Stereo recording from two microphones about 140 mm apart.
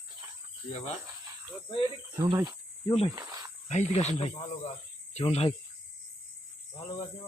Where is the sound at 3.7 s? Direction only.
55° left (ahead or behind).